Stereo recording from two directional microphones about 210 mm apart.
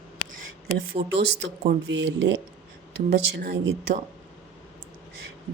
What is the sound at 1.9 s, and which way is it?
A woman's voice, 55° right (ahead or behind).